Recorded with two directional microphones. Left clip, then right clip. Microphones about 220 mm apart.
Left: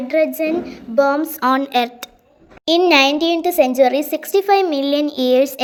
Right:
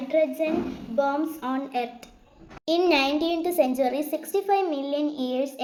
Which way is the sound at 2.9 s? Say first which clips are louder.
Left 9 dB; 40° left (ahead or behind).